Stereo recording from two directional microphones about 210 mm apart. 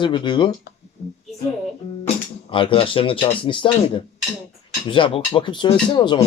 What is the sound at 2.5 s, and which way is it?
Speech, 25° left (ahead or behind).